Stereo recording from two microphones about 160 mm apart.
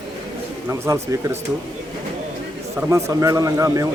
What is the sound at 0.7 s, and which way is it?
Speech, 15° right (ahead or behind).